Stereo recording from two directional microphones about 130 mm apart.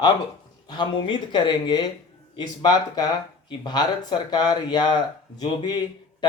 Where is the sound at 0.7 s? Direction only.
35° left (ahead or behind).